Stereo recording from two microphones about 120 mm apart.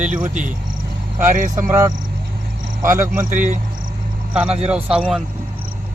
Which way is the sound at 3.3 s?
90° right.